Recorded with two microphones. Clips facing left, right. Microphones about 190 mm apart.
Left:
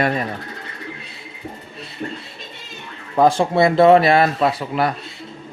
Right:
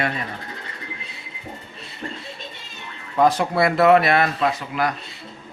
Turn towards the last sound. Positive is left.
turn(degrees=30)  # may be behind; listen again after turning